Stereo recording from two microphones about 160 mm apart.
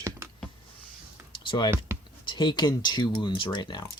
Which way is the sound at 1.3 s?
30° left (ahead or behind).